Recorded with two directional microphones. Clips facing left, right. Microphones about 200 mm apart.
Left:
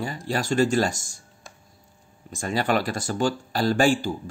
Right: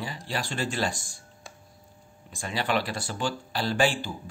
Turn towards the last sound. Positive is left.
turn(degrees=45)  # may be behind; listen again after turning